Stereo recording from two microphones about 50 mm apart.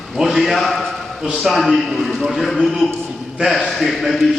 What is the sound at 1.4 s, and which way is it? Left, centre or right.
A man's voice, centre.